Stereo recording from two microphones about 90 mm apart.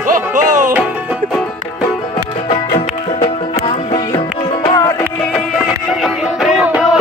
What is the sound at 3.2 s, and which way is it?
Music, 90° left.